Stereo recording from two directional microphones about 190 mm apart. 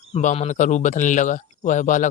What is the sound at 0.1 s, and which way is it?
Speech, 35° left (ahead or behind).